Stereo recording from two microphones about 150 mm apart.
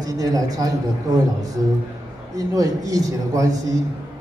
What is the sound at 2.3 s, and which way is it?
A man's voice, 25° right (ahead or behind).